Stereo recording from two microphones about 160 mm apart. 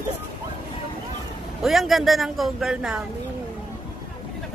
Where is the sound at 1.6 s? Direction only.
Centre (ahead or behind).